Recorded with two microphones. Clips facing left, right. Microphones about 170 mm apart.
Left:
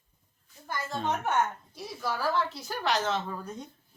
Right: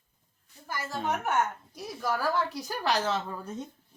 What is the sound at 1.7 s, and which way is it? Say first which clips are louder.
Speech: right 2 dB; 15° right (ahead or behind).